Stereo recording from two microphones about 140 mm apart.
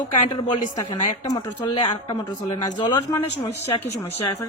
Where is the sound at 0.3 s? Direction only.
35° left (ahead or behind).